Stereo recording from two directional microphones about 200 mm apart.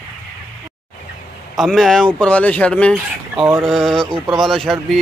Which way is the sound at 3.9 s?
25° right (ahead or behind).